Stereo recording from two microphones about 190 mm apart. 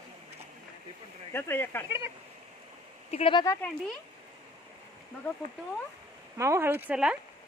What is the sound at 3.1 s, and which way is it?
Speech, 30° left (ahead or behind).